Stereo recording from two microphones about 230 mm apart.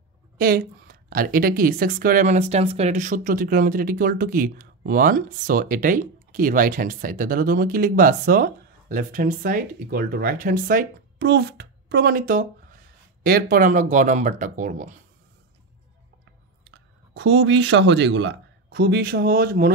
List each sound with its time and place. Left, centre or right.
0.4 s a woman's voice: right
16.6 s speech: right